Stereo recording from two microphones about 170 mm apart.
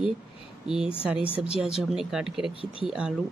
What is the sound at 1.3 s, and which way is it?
Speech, 35° left (ahead or behind).